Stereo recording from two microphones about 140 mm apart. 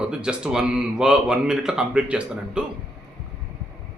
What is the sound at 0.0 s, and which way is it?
Speech, 5° right (ahead or behind).